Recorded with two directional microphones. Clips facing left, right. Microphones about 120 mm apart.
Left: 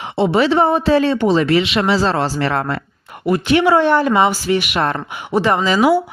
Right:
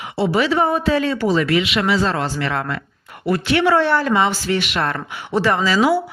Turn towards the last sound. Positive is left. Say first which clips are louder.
# left 3 dB
turn(degrees=15)  # may be behind; listen again after turning